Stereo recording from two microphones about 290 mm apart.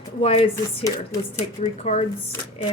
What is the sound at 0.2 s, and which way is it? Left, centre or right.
Speech, left.